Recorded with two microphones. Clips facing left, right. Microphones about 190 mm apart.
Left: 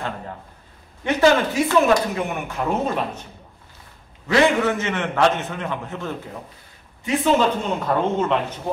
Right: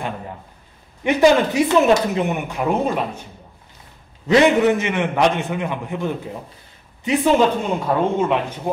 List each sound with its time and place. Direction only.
1.0 s speech: 15° right (ahead or behind)
4.3 s speech: 20° right (ahead or behind)